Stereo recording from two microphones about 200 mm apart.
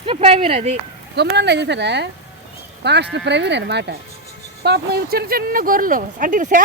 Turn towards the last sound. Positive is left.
turn(degrees=-40)  # may be behind; listen again after turning